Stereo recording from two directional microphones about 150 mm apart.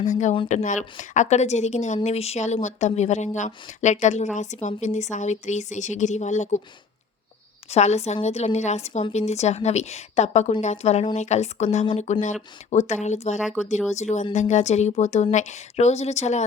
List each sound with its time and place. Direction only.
0.0 s speech: 55° left (ahead or behind)
7.7 s speech: 45° left (ahead or behind)
13.4 s speech: centre (ahead or behind)
13.9 s speech: 50° left (ahead or behind)